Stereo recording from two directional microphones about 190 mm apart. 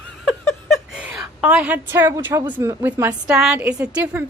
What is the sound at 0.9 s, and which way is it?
A woman's voice, 5° right (ahead or behind).